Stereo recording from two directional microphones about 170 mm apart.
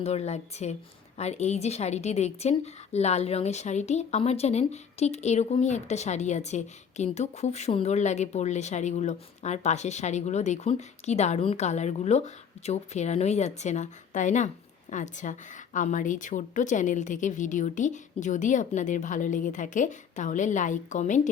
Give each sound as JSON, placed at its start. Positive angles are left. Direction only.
{"t": 0.0, "sound": "a woman's voice", "side_deg": 40}